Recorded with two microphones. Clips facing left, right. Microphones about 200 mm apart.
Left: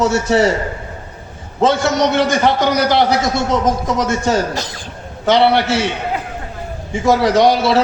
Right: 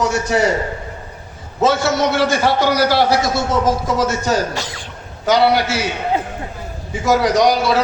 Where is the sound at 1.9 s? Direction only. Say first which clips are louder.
Left 2 dB; 20° left (ahead or behind).